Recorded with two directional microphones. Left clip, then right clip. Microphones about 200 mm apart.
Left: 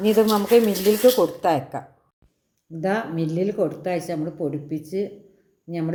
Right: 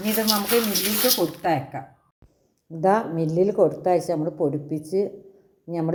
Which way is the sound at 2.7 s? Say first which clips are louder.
Right 4 dB; 10° right (ahead or behind).